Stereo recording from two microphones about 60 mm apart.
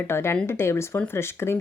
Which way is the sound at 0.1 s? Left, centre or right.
Left.